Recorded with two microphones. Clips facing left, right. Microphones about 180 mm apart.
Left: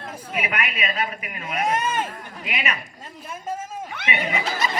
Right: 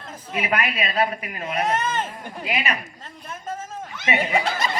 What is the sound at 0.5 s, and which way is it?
Speech, 35° right (ahead or behind).